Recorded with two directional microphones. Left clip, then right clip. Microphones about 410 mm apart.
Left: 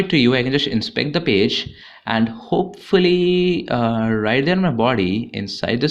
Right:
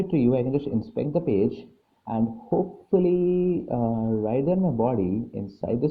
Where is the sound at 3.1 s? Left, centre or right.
Left.